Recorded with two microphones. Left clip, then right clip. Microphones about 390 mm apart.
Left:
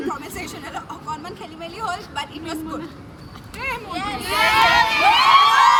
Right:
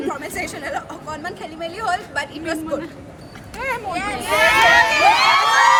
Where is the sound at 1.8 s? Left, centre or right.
Centre.